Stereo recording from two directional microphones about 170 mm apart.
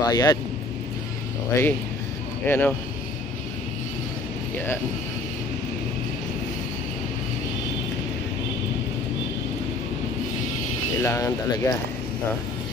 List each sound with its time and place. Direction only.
0.1 s speech: 20° left (ahead or behind)
1.5 s speech: 20° left (ahead or behind)
11.0 s speech: 20° left (ahead or behind)